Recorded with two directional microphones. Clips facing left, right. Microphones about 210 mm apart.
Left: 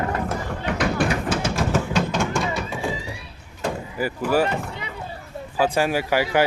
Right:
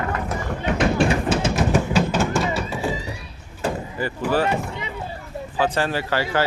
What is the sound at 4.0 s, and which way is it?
Speech, 10° left (ahead or behind).